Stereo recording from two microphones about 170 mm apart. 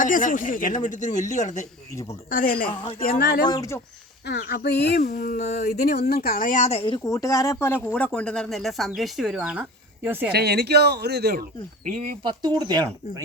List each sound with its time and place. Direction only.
0.0 s speech: 50° left (ahead or behind)
3.0 s speech: 65° left (ahead or behind)
3.4 s speech: 20° left (ahead or behind)
4.4 s speech: 65° left (ahead or behind)
5.5 s speech: 70° left (ahead or behind); by 10.3 s 10° right (ahead or behind)
10.3 s speech: 75° right (ahead or behind)
12.2 s speech: 25° right (ahead or behind)